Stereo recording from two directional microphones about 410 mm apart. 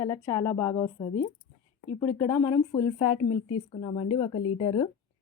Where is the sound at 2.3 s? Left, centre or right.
Centre.